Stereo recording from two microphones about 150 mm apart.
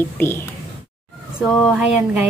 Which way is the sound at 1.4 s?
10° right (ahead or behind).